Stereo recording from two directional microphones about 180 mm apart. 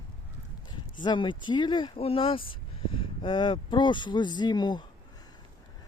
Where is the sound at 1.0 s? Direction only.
25° left (ahead or behind).